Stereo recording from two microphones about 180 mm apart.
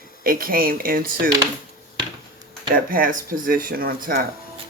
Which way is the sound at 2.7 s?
50° right (ahead or behind).